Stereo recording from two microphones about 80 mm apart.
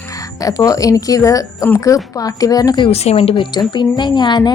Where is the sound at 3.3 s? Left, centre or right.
Left.